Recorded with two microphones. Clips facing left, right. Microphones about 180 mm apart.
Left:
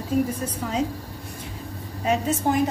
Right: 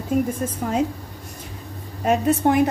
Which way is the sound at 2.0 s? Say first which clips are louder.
Right 4 dB; 65° right (ahead or behind).